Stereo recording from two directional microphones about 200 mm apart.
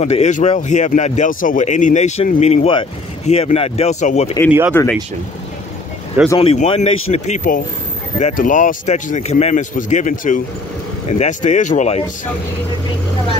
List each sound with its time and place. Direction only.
0.0 s speech: 35° left (ahead or behind)
4.5 s speech: 10° right (ahead or behind)
6.3 s speech: 30° left (ahead or behind)